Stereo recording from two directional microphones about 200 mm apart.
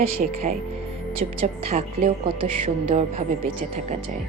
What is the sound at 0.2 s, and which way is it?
Speech, 40° right (ahead or behind).